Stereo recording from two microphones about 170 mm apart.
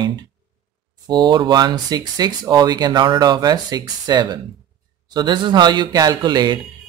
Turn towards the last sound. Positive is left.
turn(degrees=-25)  # may be behind; listen again after turning